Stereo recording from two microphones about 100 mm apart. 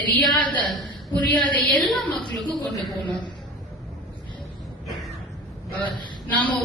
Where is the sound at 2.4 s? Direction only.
50° left (ahead or behind).